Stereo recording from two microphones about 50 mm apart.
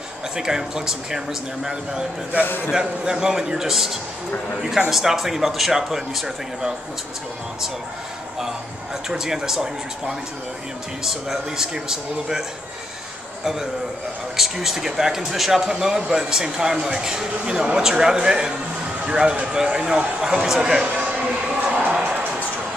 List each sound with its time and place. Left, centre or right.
0.4 s speech: centre
2.4 s a man's voice: left
2.7 s speech: centre
9.1 s a man's voice: centre
20.8 s a sound: right